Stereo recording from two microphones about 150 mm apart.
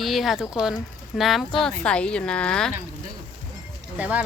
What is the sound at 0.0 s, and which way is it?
A woman's voice, centre (ahead or behind).